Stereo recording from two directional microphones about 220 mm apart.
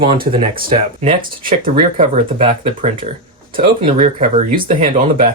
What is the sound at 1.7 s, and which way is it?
Speech, 25° right (ahead or behind).